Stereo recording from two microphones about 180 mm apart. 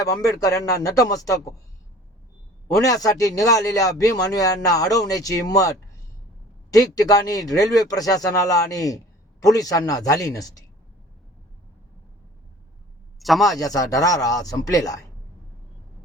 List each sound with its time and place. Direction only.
0.0 s a man's voice: 20° left (ahead or behind)
2.7 s a man's voice: 20° left (ahead or behind)
6.7 s a man's voice: 20° left (ahead or behind)
13.1 s speech: centre (ahead or behind)
13.6 s a man's voice: 20° left (ahead or behind)